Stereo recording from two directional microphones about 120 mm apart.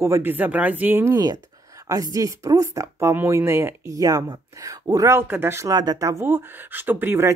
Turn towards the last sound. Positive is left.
turn(degrees=-15)  # may be behind; listen again after turning